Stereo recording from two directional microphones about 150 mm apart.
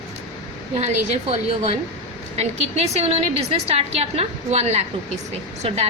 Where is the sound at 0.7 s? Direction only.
45° right (ahead or behind).